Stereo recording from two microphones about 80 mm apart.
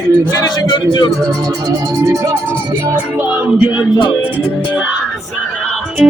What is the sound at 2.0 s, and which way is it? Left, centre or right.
Speech, right.